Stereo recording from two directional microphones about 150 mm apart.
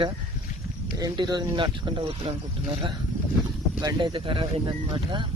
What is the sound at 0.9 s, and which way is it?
Speech, 25° right (ahead or behind).